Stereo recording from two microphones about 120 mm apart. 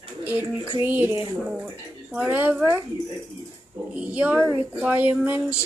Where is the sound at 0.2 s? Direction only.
15° right (ahead or behind).